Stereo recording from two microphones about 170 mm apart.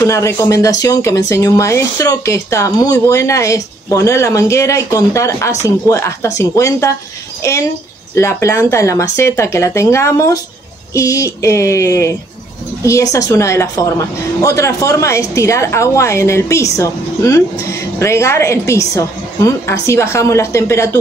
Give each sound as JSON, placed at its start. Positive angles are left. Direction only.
{"t": 0.0, "sound": "speech", "side_deg": 15}